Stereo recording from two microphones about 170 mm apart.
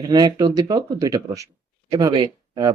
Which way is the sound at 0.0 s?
25° right (ahead or behind).